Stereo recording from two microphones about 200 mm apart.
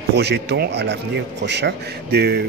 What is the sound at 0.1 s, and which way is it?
A man's voice, 55° right (ahead or behind).